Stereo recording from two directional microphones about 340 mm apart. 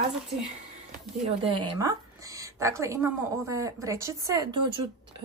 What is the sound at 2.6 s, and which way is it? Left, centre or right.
A woman's voice, centre.